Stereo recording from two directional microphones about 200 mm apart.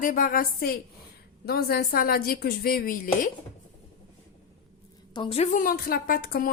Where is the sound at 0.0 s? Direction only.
45° left (ahead or behind).